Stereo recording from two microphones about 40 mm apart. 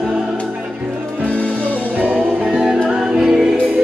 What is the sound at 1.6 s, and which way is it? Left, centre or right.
Music, right.